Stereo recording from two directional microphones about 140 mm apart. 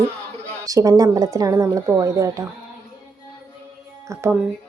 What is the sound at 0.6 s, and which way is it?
A woman's voice, 25° right (ahead or behind).